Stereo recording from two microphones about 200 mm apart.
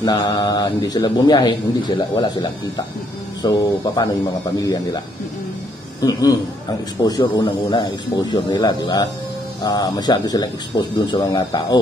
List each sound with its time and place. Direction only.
0.0 s a man's voice: 20° left (ahead or behind)